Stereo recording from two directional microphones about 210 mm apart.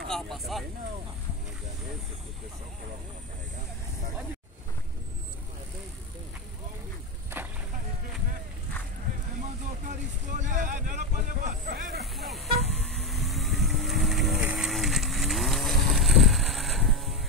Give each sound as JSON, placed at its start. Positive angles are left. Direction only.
{"t": 0.0, "sound": "vehicle", "side_deg": 0}
{"t": 9.4, "sound": "vehicle", "side_deg": -35}
{"t": 12.0, "sound": "vehicle", "side_deg": 0}